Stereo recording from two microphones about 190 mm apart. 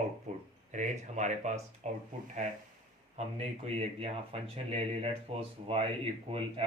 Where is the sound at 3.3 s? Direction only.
30° right (ahead or behind).